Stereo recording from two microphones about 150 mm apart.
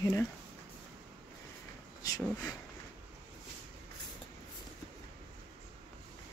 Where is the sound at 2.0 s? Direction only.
20° left (ahead or behind).